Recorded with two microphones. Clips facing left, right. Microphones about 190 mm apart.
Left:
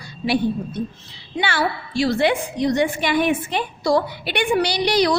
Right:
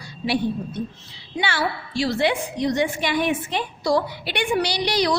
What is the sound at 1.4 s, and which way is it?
A woman's voice, 55° left (ahead or behind).